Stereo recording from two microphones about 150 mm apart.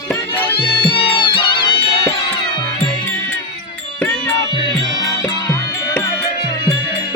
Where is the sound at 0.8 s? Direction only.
35° left (ahead or behind).